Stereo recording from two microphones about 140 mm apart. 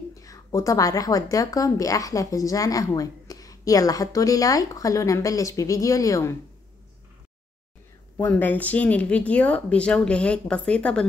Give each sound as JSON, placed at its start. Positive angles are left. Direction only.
{"t": 0.1, "sound": "a woman's voice", "side_deg": 25}
{"t": 8.2, "sound": "speech", "side_deg": 15}